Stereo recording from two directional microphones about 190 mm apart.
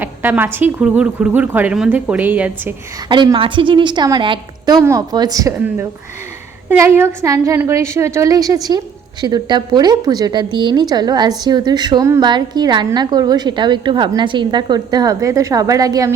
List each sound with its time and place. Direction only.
0.0 s speech: 10° right (ahead or behind)
3.1 s a woman's voice: 25° right (ahead or behind)